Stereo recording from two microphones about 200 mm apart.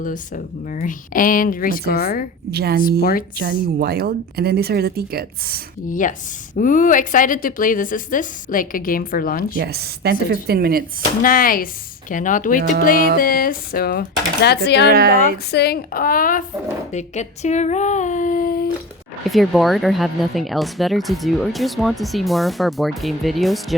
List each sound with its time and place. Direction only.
0.0 s a woman's voice: 40° left (ahead or behind)
2.5 s speech: 55° right (ahead or behind)
3.0 s a woman's voice: 45° left (ahead or behind)
3.3 s speech: 55° right (ahead or behind)
5.9 s a woman's voice: 40° left (ahead or behind)
9.6 s speech: 55° right (ahead or behind)
11.2 s a woman's voice: 45° left (ahead or behind)
14.8 s speech: 50° right (ahead or behind)
15.5 s a woman's voice: 55° left (ahead or behind)
19.3 s speech: centre (ahead or behind)